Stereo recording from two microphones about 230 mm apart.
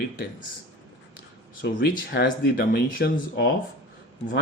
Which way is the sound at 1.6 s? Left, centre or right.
Left.